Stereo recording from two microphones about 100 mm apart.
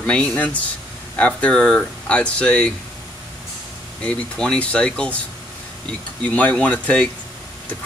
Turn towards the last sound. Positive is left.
turn(degrees=10)  # may be behind; listen again after turning